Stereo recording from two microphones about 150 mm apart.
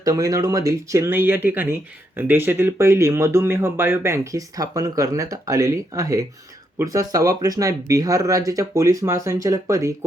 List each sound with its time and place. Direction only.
0.0 s speech: 25° right (ahead or behind)